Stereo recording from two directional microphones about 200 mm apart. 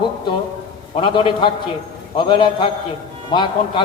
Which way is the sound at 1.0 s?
25° left (ahead or behind).